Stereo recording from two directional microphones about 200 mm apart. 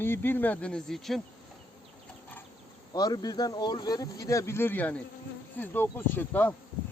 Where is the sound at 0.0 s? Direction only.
10° left (ahead or behind).